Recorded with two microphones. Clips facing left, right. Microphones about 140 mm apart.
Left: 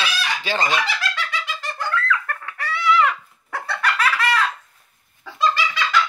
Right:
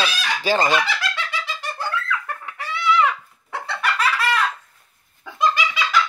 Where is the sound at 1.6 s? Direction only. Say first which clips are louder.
Left 4 dB; 10° right (ahead or behind).